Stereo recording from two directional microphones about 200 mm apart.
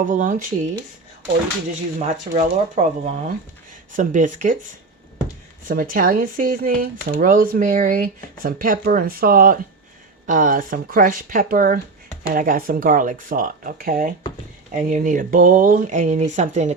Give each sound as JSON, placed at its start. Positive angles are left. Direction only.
{"t": 0.0, "sound": "speech", "side_deg": -40}
{"t": 2.0, "sound": "speech", "side_deg": -35}
{"t": 5.6, "sound": "speech", "side_deg": -45}